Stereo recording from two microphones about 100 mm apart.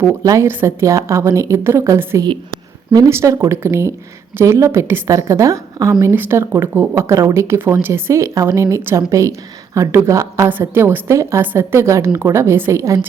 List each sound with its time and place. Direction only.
0.0 s speech: 30° right (ahead or behind)